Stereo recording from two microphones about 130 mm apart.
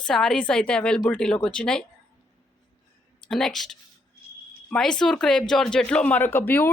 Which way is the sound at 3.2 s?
5° left (ahead or behind).